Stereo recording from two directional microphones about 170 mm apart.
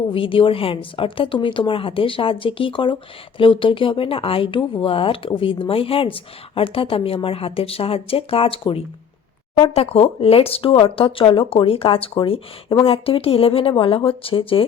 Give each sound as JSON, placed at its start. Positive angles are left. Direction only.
{"t": 0.1, "sound": "speech", "side_deg": 30}